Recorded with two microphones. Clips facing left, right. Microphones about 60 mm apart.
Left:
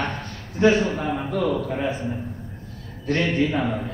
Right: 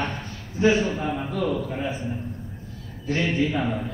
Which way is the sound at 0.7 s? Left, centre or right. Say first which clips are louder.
Left 2 dB; centre.